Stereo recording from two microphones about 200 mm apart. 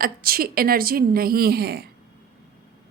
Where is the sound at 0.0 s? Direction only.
50° right (ahead or behind).